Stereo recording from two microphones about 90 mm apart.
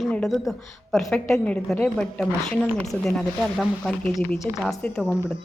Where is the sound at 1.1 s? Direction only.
10° left (ahead or behind).